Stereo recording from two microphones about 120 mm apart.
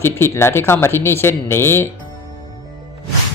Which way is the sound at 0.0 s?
20° left (ahead or behind).